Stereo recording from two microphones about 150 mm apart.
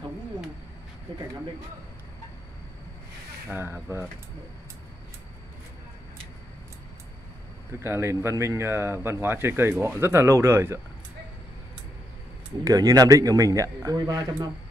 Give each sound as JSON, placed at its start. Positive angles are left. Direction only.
{"t": 3.4, "sound": "speech", "side_deg": -15}
{"t": 7.8, "sound": "speech", "side_deg": -15}
{"t": 12.6, "sound": "speech", "side_deg": -25}